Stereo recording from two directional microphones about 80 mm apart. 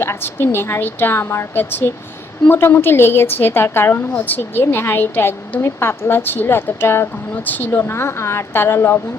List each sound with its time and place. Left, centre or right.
0.0 s a woman's voice: left